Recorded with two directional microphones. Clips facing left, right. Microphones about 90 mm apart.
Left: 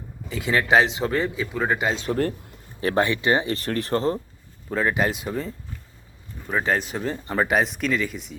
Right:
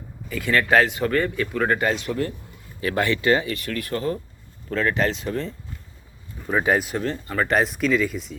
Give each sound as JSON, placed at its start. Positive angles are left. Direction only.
{"t": 0.3, "sound": "speech", "side_deg": 20}
{"t": 1.9, "sound": "speech", "side_deg": 30}
{"t": 4.7, "sound": "speech", "side_deg": 15}
{"t": 6.5, "sound": "speech", "side_deg": -10}
{"t": 6.9, "sound": "speech", "side_deg": 5}